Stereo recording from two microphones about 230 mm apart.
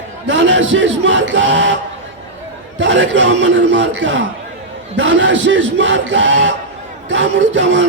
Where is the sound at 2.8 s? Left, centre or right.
Right.